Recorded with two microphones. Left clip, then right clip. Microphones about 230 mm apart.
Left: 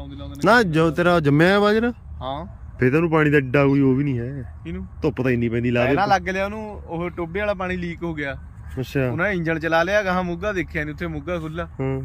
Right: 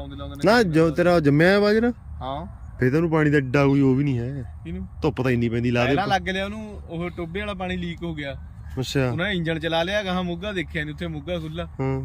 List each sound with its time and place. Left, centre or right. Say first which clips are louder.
0.2 s speech: left 2 dB; left
2.2 s speech: left 2 dB; centre
6.2 s speech: left 3 dB; centre